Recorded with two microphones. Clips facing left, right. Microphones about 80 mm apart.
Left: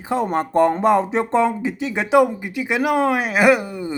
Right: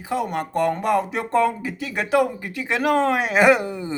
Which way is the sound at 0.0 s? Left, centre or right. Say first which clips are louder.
Left 4 dB; left.